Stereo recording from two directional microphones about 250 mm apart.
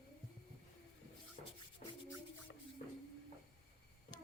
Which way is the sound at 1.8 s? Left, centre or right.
Left.